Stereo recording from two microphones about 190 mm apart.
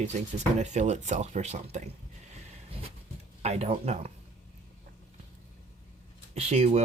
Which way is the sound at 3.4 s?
35° right (ahead or behind).